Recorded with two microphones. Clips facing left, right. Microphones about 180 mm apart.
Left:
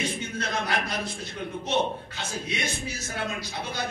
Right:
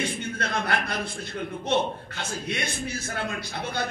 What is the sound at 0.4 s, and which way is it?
A man's voice, 60° right (ahead or behind).